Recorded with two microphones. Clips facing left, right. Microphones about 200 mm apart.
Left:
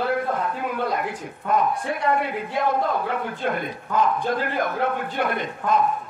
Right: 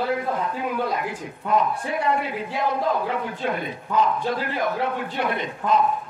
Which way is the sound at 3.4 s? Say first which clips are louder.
Even; 50° left (ahead or behind).